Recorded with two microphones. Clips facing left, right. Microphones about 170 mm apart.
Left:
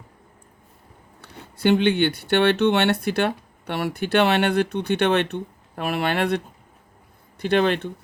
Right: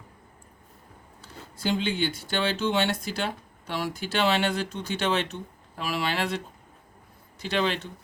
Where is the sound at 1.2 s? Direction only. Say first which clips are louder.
Left 9 dB; 65° left (ahead or behind).